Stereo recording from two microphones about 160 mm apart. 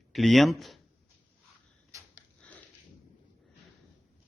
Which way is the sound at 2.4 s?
10° left (ahead or behind).